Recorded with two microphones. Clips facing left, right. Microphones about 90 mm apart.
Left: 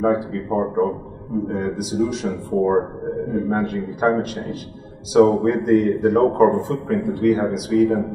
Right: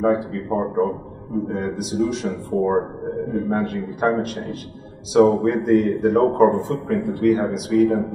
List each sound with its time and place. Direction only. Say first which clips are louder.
0.0 s a man's voice: even; centre (ahead or behind)